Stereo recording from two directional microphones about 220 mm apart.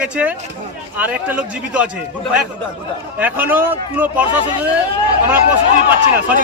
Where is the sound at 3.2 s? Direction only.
10° right (ahead or behind).